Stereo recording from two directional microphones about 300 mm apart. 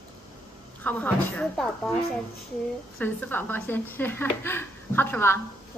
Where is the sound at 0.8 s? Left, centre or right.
Centre.